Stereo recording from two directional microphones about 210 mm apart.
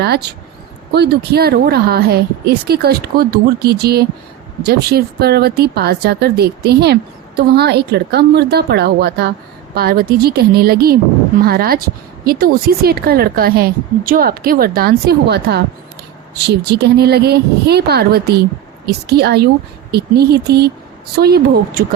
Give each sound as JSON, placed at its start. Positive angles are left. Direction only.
{"t": 0.0, "sound": "a woman's voice", "side_deg": -50}